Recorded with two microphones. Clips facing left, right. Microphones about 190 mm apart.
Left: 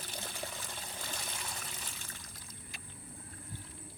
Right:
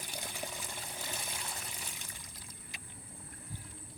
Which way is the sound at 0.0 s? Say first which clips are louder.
Even; 15° right (ahead or behind).